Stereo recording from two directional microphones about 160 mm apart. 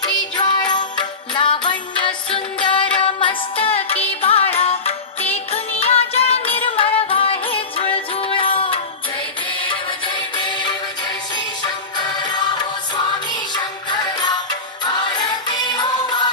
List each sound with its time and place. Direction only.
0.0 s music: 25° left (ahead or behind)
10.3 s music: 30° left (ahead or behind)
13.5 s music: 25° left (ahead or behind)